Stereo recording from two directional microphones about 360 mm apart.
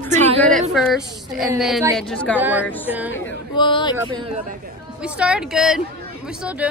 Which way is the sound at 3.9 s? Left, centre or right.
Centre.